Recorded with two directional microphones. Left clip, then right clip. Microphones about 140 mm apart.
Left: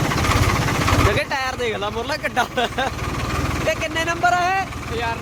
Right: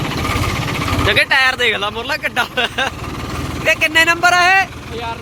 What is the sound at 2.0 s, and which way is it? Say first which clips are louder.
Speech: right 3 dB; 15° left (ahead or behind).